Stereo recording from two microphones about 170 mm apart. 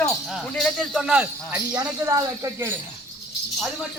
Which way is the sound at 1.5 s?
20° right (ahead or behind).